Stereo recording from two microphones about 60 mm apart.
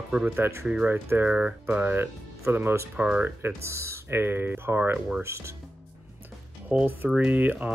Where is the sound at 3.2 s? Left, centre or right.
Right.